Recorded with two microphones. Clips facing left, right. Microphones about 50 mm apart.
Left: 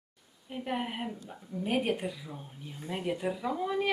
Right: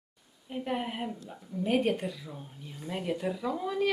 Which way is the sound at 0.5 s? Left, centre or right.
Centre.